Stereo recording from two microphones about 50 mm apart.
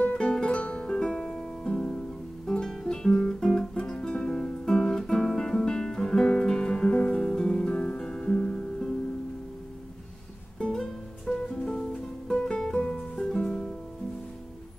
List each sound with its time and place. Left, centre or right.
0.0 s music: centre
10.6 s music: centre